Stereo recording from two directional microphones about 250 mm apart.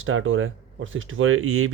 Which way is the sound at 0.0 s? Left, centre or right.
Right.